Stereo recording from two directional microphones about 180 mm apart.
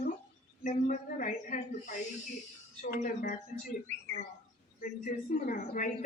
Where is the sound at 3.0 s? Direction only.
45° left (ahead or behind).